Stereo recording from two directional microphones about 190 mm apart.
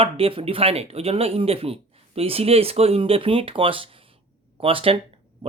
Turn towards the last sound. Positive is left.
turn(degrees=-25)  # may be behind; listen again after turning